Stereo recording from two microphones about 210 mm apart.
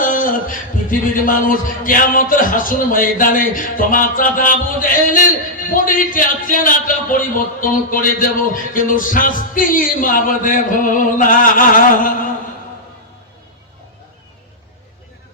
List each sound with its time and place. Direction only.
0.0 s a man's voice: 40° left (ahead or behind)